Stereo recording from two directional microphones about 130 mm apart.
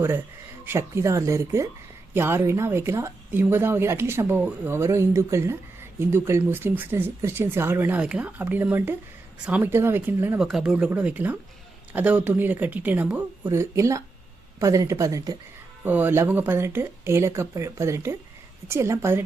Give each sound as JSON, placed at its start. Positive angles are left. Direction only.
{"t": 0.6, "sound": "speech", "side_deg": -20}
{"t": 10.3, "sound": "speech", "side_deg": -5}
{"t": 13.5, "sound": "speech", "side_deg": -20}
{"t": 15.8, "sound": "speech", "side_deg": -15}